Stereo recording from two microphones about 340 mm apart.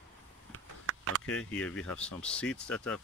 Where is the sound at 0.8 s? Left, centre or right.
Right.